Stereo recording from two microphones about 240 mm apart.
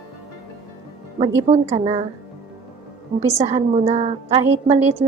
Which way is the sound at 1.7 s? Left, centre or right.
Right.